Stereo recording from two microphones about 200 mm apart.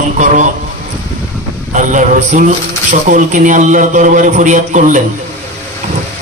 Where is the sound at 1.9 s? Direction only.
40° right (ahead or behind).